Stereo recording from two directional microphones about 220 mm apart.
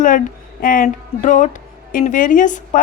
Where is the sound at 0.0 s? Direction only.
40° left (ahead or behind).